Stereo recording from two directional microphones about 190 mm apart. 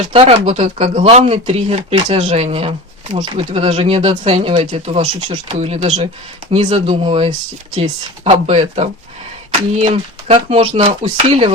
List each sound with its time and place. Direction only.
0.1 s speech: 30° right (ahead or behind)